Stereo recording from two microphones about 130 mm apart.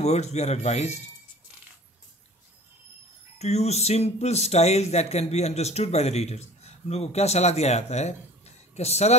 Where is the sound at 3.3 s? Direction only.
55° left (ahead or behind).